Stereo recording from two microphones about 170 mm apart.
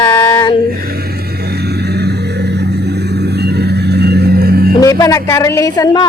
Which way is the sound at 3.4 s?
70° right (ahead or behind).